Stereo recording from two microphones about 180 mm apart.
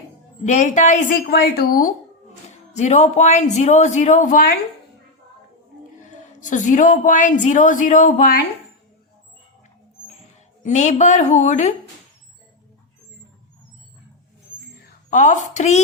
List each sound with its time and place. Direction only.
0.4 s a woman's voice: 40° left (ahead or behind)
1.3 s speech: 60° left (ahead or behind)
2.7 s speech: 40° left (ahead or behind)
6.0 s a woman's voice: 45° left (ahead or behind)
10.6 s speech: 40° left (ahead or behind)
14.8 s a woman's voice: 45° left (ahead or behind)